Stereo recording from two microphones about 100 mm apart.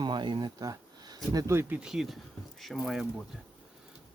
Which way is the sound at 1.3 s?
25° right (ahead or behind).